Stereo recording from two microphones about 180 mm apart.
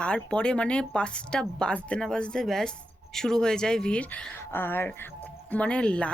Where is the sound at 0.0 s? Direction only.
5° left (ahead or behind).